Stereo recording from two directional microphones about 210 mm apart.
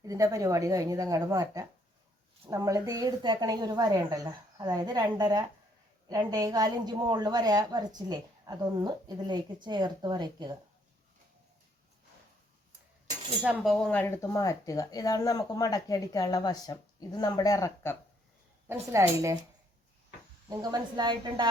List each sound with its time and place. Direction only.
0.0 s a woman's voice: 15° right (ahead or behind)
13.4 s speech: 5° right (ahead or behind); by 17.9 s 15° left (ahead or behind)
18.7 s a woman's voice: 15° right (ahead or behind)
20.5 s a woman's voice: 20° right (ahead or behind)